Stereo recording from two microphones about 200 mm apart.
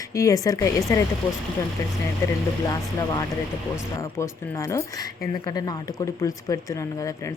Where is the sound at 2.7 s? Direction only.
20° left (ahead or behind).